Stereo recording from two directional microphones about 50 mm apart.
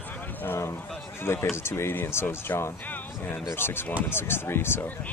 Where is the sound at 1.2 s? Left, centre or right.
Left.